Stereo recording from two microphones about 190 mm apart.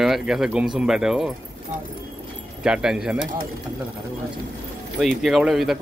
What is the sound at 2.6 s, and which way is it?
Speech, 5° right (ahead or behind).